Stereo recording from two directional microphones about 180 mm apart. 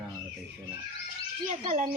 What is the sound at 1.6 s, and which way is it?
Speech, 45° right (ahead or behind).